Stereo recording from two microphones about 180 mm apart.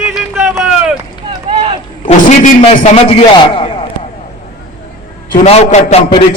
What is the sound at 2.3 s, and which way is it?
Speech, 45° left (ahead or behind).